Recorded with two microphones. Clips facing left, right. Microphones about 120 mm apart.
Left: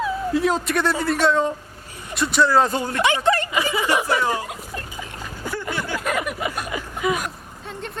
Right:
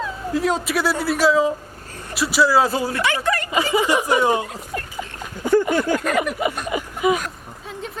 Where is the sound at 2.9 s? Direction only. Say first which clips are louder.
Left 2 dB; 20° left (ahead or behind).